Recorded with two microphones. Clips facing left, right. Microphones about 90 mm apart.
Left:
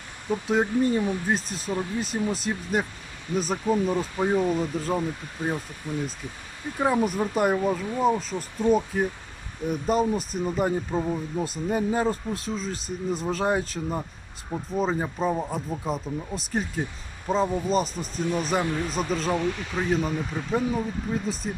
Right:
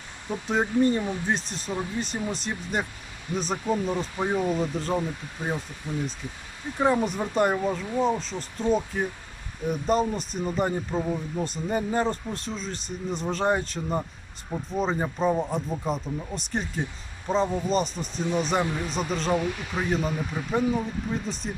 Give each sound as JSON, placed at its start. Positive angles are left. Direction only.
{"t": 0.3, "sound": "speech", "side_deg": 5}
{"t": 5.9, "sound": "speech", "side_deg": -15}
{"t": 6.7, "sound": "speech", "side_deg": 5}